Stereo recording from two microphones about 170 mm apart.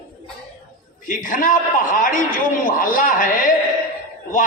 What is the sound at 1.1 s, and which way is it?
A man's voice, 50° left (ahead or behind).